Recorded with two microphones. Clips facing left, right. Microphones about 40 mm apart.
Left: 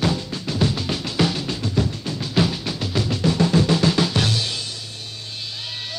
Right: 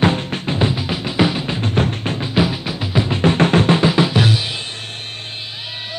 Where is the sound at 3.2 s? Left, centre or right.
Right.